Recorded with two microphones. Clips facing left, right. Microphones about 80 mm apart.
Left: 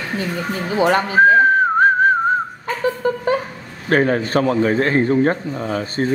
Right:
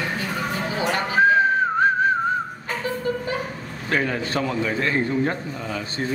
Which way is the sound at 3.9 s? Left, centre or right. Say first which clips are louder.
Left 7 dB; left.